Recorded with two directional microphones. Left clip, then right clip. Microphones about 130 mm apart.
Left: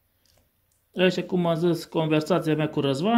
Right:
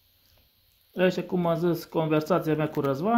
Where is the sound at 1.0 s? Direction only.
25° left (ahead or behind).